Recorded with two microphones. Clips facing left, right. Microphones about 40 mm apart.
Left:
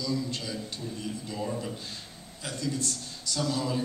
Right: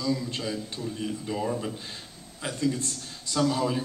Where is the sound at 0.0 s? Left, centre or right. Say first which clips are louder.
Right 3 dB; right.